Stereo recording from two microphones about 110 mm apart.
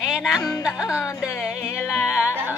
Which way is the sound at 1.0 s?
25° left (ahead or behind).